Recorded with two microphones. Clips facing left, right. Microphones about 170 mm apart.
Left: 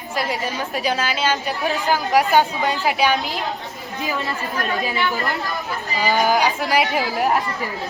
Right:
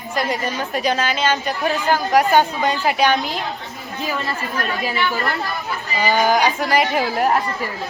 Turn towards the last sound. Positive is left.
turn(degrees=0)  # may be behind; listen again after turning